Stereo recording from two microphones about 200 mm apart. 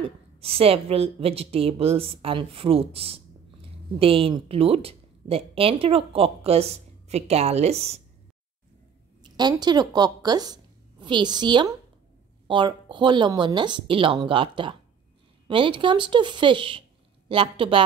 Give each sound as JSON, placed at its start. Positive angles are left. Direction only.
{"t": 0.0, "sound": "a woman's voice", "side_deg": -30}
{"t": 9.2, "sound": "a woman's voice", "side_deg": -20}